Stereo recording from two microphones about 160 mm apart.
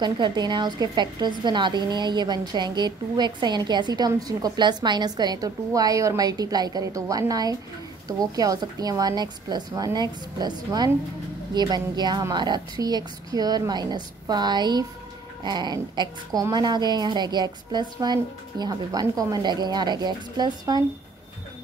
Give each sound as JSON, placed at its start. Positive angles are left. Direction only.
{"t": 0.0, "sound": "a woman's voice", "side_deg": -25}